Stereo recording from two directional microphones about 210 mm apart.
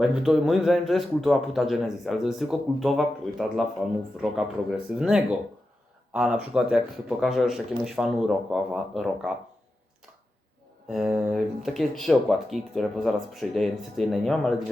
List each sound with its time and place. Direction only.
0.0 s a man's voice: centre (ahead or behind)
10.8 s a man's voice: 5° right (ahead or behind)